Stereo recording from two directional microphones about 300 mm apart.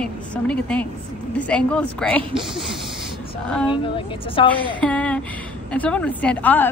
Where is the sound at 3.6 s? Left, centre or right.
Centre.